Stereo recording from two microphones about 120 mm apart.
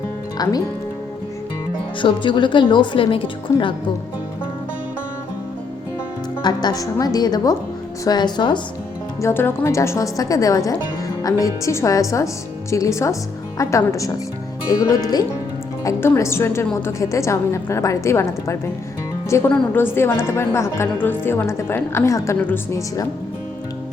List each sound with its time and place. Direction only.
0.4 s a woman's voice: 35° left (ahead or behind)
2.0 s speech: 45° left (ahead or behind)
6.4 s a woman's voice: 35° left (ahead or behind)
9.2 s a woman's voice: 20° left (ahead or behind)